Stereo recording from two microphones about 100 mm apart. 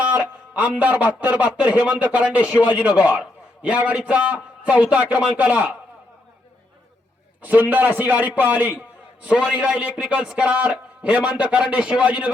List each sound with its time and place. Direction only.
0.0 s a man's voice: 15° right (ahead or behind)
7.4 s a man's voice: 15° right (ahead or behind)